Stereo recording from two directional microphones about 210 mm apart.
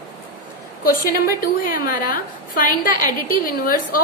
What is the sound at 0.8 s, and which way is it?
A woman's voice, 45° left (ahead or behind).